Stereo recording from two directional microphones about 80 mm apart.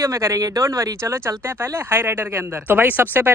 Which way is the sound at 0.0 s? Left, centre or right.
Right.